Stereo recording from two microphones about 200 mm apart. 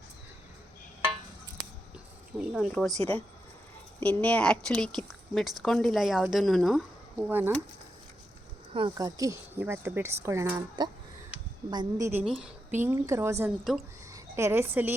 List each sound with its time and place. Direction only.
2.4 s speech: 5° right (ahead or behind)
4.0 s speech: 5° left (ahead or behind); by 7.5 s 10° right (ahead or behind)
8.7 s a woman's voice: 20° right (ahead or behind)
12.2 s speech: centre (ahead or behind)
12.8 s a woman's voice: 15° right (ahead or behind)